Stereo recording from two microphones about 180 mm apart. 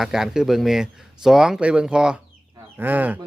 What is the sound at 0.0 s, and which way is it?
Speech, centre (ahead or behind).